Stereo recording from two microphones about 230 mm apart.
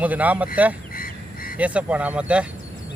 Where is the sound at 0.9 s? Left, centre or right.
Left.